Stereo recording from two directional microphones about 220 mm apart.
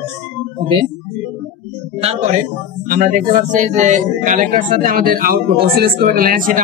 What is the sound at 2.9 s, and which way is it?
A man's voice, 35° right (ahead or behind).